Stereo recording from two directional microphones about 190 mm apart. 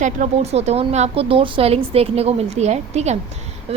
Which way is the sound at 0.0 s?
40° right (ahead or behind).